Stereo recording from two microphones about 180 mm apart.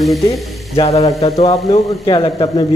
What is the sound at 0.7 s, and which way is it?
Speech, 35° left (ahead or behind).